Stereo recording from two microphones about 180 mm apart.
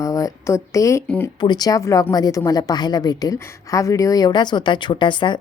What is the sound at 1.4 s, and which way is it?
A woman's voice, 25° left (ahead or behind).